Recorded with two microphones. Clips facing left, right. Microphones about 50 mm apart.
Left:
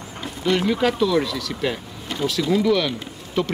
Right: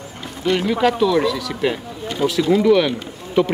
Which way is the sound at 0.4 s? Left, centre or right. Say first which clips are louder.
Right 2 dB; centre.